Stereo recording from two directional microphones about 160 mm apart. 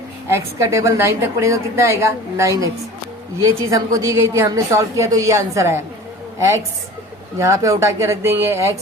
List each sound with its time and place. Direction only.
0.3 s a woman's voice: 15° right (ahead or behind)
7.3 s a woman's voice: 20° right (ahead or behind)